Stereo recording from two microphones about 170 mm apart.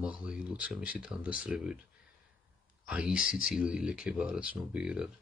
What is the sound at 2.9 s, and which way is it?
Speech, 5° right (ahead or behind).